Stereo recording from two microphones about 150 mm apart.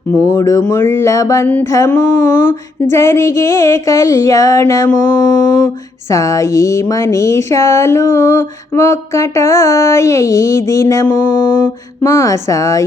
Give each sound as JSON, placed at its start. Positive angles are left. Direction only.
{"t": 0.1, "sound": "speech", "side_deg": 15}